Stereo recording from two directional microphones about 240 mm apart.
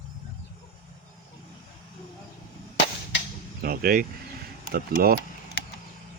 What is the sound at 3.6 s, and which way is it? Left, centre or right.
Speech, right.